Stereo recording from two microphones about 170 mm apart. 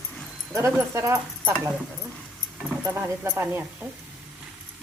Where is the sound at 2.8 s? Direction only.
15° right (ahead or behind).